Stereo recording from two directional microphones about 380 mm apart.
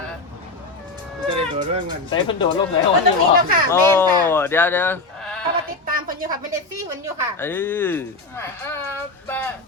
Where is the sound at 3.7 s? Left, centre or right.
Centre.